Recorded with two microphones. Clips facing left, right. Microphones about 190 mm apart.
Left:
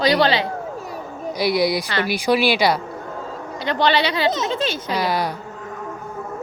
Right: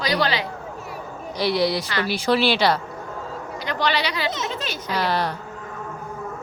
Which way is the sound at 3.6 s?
30° left (ahead or behind).